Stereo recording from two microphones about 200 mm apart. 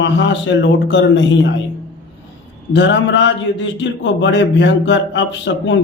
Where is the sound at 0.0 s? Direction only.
65° left (ahead or behind).